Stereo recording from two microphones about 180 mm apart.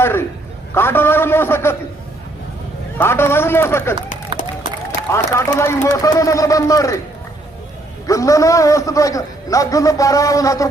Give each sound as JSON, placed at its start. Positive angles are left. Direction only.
{"t": 0.0, "sound": "a sound", "side_deg": 10}
{"t": 0.7, "sound": "a man's voice", "side_deg": 10}
{"t": 3.0, "sound": "a man's voice", "side_deg": 15}
{"t": 5.1, "sound": "a man's voice", "side_deg": 15}
{"t": 8.0, "sound": "a man's voice", "side_deg": 15}